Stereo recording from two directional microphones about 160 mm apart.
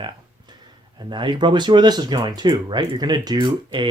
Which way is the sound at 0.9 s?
30° right (ahead or behind).